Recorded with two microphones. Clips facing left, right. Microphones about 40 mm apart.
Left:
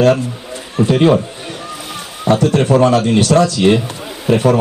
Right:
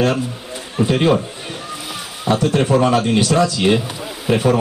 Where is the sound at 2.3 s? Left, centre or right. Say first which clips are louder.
Left 3 dB; centre.